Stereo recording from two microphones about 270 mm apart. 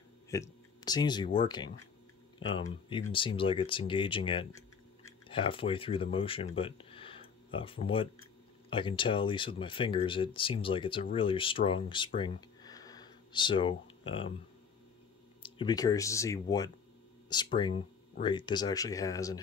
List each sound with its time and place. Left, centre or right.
0.3 s speech: centre
12.2 s a sound: centre
15.4 s speech: centre